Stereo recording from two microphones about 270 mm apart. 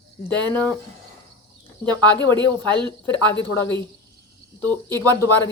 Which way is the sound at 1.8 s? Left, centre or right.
Centre.